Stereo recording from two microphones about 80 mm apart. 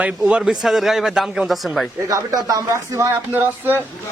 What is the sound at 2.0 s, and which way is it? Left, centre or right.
Speech, right.